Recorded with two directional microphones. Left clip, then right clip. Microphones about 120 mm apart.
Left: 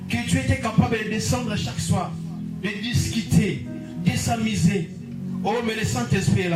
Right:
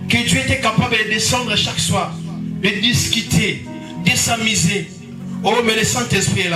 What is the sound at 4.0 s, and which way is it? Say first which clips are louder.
Speech: right 9 dB; 25° right (ahead or behind).